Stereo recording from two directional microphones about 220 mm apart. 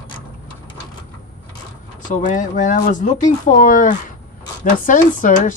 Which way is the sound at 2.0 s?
35° left (ahead or behind).